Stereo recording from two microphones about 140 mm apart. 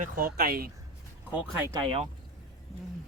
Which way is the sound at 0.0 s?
90° right.